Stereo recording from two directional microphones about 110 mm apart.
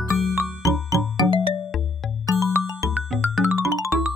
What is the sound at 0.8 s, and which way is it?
Music, 30° left (ahead or behind).